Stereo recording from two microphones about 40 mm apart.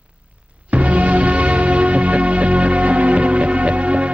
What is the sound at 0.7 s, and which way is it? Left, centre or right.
Music, right.